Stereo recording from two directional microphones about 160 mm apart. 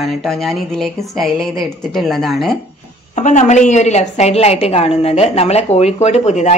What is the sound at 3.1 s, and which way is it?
A woman's voice, 50° left (ahead or behind).